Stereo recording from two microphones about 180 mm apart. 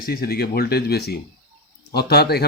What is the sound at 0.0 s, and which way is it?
Speech, 60° left (ahead or behind).